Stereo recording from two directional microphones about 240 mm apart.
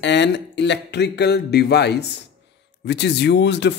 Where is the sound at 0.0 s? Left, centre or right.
Left.